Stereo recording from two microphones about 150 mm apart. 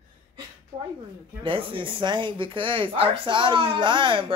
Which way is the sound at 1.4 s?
35° right (ahead or behind).